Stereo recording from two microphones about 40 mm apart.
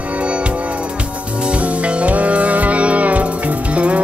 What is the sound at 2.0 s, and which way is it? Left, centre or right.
Music, right.